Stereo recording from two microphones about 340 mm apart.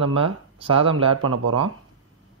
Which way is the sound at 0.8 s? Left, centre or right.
Right.